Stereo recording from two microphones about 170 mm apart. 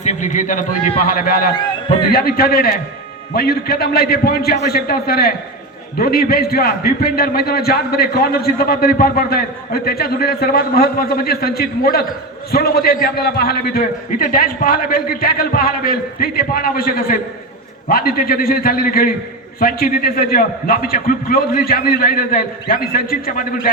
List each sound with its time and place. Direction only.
0.0 s a man's voice: 45° left (ahead or behind)